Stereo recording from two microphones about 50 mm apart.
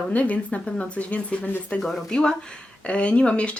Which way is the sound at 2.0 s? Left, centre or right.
Centre.